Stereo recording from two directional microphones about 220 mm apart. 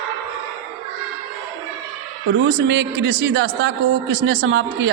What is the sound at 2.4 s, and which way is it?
A woman's voice, 55° right (ahead or behind).